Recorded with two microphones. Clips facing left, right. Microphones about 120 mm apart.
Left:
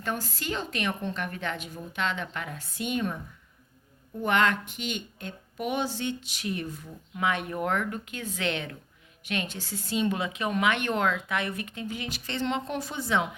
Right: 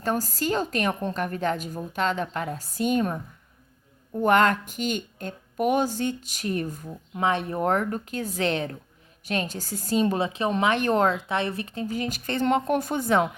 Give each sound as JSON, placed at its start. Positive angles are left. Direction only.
{"t": 0.0, "sound": "a woman's voice", "side_deg": -40}